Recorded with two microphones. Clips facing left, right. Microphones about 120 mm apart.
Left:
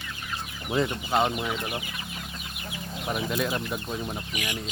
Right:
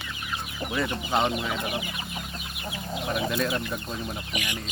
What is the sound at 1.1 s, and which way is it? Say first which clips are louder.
Speech: even; centre (ahead or behind).